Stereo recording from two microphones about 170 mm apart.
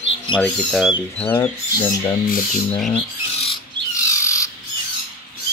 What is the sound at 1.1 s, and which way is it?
Speech, 10° left (ahead or behind).